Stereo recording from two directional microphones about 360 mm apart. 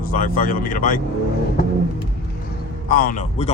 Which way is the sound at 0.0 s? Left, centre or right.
Left.